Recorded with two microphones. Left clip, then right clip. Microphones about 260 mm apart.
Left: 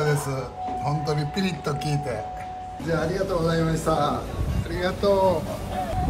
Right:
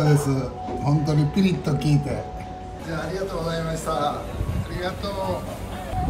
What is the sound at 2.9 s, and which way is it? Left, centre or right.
Speech, centre.